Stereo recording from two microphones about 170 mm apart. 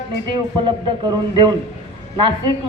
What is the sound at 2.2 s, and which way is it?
Speech, 30° right (ahead or behind).